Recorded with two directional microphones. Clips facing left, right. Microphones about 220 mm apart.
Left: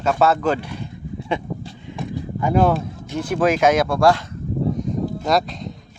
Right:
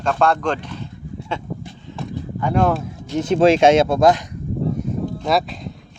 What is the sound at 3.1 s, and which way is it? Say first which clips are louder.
Speech: right 5 dB; 20° right (ahead or behind).